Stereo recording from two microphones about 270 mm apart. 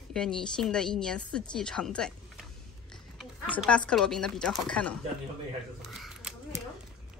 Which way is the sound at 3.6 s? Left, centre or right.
Centre.